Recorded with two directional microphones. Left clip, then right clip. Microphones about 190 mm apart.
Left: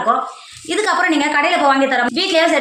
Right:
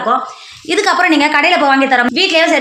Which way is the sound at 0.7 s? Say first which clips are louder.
Right 4 dB; 50° right (ahead or behind).